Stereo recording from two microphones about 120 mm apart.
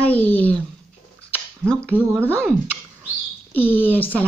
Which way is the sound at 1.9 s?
15° right (ahead or behind).